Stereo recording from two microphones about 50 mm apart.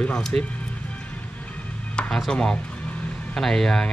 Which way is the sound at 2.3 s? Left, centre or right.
Centre.